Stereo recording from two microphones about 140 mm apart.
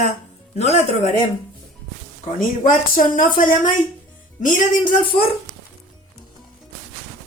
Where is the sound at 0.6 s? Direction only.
55° left (ahead or behind).